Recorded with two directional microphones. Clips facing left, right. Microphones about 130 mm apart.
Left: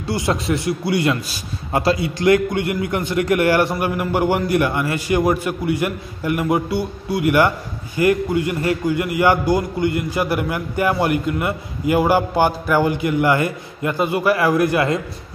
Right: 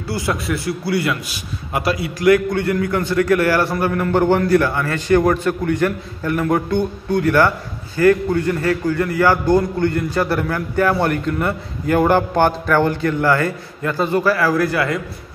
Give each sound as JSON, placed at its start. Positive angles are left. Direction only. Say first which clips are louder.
{"t": 0.0, "sound": "a man's voice", "louder": "left 1 dB", "side_deg": 20}